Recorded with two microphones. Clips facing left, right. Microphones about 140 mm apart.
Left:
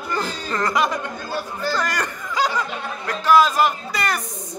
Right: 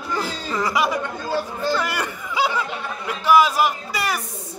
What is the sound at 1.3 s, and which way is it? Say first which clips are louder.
Chatter: right 3 dB; 25° right (ahead or behind).